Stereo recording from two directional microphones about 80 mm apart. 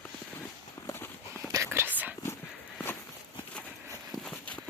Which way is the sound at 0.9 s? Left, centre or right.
Left.